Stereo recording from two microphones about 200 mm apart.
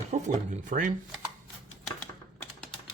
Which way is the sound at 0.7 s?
40° right (ahead or behind).